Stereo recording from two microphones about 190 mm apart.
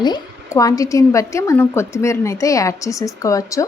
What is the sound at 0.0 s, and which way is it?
A woman's voice, 20° left (ahead or behind).